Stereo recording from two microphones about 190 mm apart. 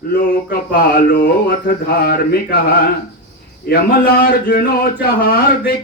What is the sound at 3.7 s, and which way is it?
Speech, 55° left (ahead or behind).